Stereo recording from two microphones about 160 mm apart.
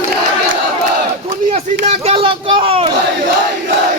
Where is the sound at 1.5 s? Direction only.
35° right (ahead or behind).